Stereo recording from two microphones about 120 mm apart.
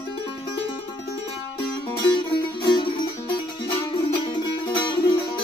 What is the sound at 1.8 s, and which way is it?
Music, 45° left (ahead or behind).